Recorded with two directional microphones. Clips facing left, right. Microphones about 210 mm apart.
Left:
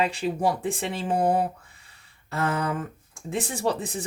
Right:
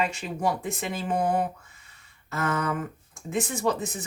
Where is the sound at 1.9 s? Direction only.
30° left (ahead or behind).